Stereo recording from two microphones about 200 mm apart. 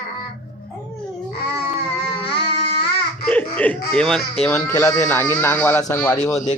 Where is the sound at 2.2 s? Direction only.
25° left (ahead or behind).